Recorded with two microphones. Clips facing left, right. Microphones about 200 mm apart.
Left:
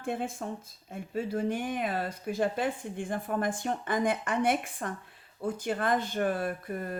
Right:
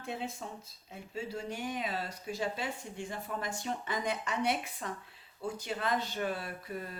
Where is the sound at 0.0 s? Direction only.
50° left (ahead or behind).